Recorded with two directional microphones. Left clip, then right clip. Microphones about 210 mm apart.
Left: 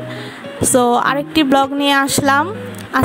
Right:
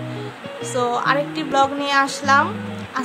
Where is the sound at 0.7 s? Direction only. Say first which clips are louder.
Left 5 dB; 40° left (ahead or behind).